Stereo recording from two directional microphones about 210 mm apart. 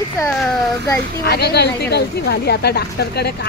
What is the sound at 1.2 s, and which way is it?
A woman's voice, 50° left (ahead or behind).